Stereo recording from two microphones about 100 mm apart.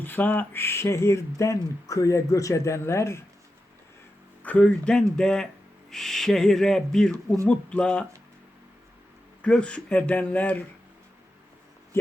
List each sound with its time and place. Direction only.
0.0 s speech: 20° left (ahead or behind)
4.4 s speech: 15° left (ahead or behind)
9.4 s speech: 10° left (ahead or behind)